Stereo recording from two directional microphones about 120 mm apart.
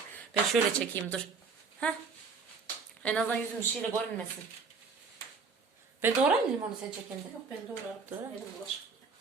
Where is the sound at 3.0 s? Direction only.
10° left (ahead or behind).